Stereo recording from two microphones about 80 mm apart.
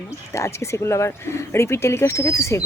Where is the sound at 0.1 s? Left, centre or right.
Left.